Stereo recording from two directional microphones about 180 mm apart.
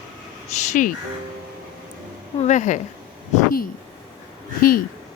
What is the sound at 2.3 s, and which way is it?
Speech, 40° left (ahead or behind).